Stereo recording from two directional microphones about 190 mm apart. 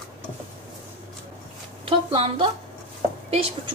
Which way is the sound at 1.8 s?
30° right (ahead or behind).